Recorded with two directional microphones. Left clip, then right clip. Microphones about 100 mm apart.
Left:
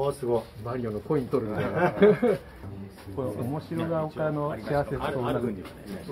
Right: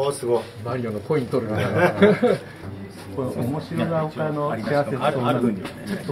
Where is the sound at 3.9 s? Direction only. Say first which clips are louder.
Right 2 dB; 30° right (ahead or behind).